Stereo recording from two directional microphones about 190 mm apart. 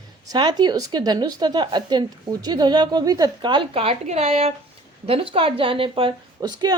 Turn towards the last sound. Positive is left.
turn(degrees=-20)  # may be behind; listen again after turning